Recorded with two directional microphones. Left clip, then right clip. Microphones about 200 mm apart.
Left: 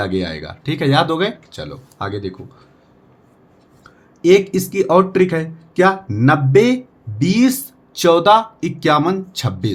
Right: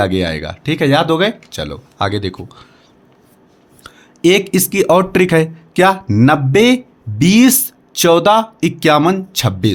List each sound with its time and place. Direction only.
0.0 s speech: 30° right (ahead or behind)
3.8 s speech: 40° right (ahead or behind)